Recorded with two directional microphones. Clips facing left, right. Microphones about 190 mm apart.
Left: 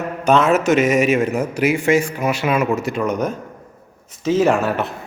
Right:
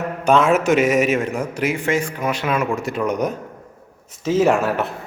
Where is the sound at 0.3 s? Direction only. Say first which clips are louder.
Left 1 dB; 10° right (ahead or behind).